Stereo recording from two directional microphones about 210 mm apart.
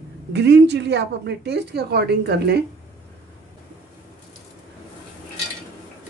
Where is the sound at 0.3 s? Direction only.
55° right (ahead or behind).